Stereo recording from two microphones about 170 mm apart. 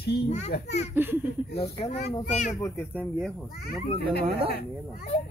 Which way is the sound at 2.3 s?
45° left (ahead or behind).